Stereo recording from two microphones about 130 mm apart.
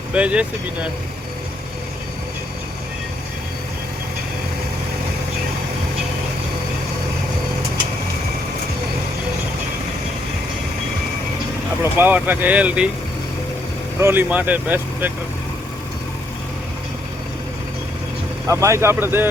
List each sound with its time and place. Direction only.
0.1 s speech: 10° right (ahead or behind)
11.8 s speech: 15° right (ahead or behind)
14.0 s speech: 15° right (ahead or behind)
18.4 s speech: 20° right (ahead or behind)